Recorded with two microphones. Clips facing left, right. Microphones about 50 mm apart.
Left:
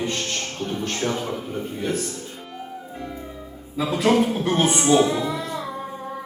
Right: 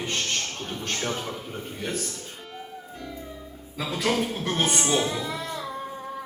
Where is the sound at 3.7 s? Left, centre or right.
Left.